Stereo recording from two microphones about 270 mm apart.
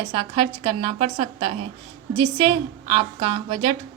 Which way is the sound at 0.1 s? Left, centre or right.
Right.